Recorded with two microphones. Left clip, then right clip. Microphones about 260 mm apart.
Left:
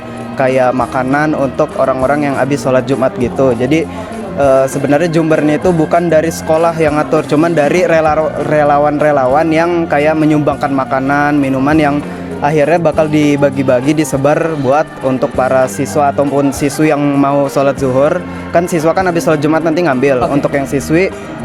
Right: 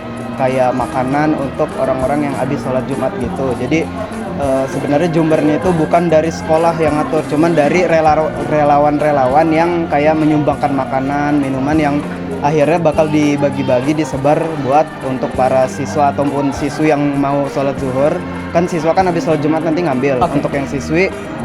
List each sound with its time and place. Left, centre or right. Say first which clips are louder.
0.3 s speech: left 3 dB; left
3.6 s speech: left 3 dB; left